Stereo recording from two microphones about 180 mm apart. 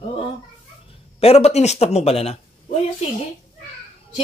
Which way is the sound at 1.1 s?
35° left (ahead or behind).